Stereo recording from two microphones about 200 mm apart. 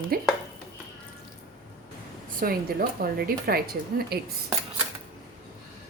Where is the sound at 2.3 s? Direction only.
45° right (ahead or behind).